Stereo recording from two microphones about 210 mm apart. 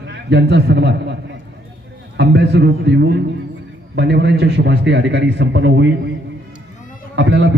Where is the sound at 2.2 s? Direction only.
55° right (ahead or behind).